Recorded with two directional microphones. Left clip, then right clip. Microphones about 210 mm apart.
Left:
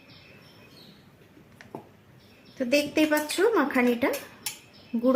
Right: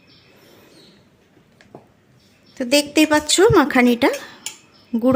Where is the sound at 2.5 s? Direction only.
50° right (ahead or behind).